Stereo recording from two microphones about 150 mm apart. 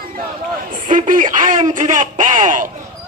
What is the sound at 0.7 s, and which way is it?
Speech, 65° right (ahead or behind).